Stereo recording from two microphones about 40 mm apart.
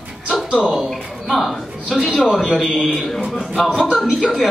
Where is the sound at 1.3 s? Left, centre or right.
Centre.